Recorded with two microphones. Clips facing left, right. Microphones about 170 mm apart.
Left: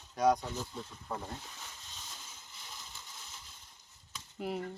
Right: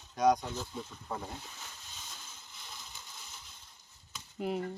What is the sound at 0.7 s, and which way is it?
Speech, 5° right (ahead or behind).